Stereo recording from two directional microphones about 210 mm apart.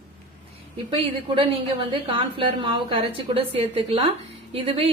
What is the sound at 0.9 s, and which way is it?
A woman's voice, 25° right (ahead or behind).